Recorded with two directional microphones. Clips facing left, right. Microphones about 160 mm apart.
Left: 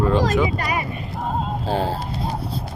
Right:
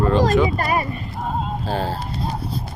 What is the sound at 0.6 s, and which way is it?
Speech, 40° right (ahead or behind).